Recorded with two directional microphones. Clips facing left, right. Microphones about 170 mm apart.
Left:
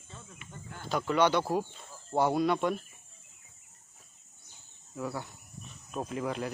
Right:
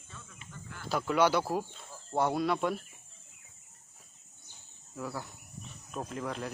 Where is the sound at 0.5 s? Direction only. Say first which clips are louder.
Left 1 dB; 25° left (ahead or behind).